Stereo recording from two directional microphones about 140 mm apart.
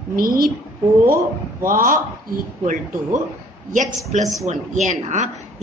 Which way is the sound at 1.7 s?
75° right (ahead or behind).